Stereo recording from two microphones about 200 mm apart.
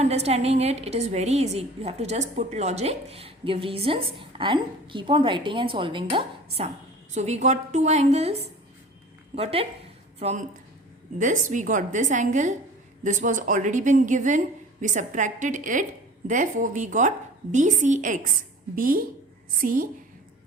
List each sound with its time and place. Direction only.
0.0 s a woman's voice: 30° right (ahead or behind)